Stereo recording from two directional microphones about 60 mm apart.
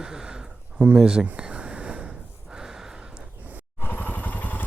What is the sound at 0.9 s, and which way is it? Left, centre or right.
Speech, centre.